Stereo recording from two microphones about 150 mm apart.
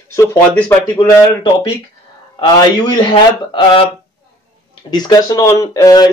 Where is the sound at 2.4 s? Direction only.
30° left (ahead or behind).